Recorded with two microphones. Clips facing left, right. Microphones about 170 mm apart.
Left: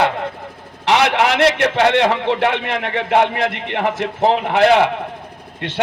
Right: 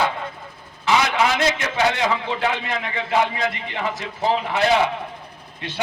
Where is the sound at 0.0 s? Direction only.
70° left (ahead or behind).